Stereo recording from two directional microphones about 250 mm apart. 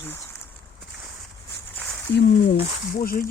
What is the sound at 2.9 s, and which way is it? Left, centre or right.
Speech, left.